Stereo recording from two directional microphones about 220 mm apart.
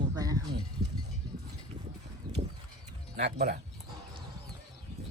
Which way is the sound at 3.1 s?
50° right (ahead or behind).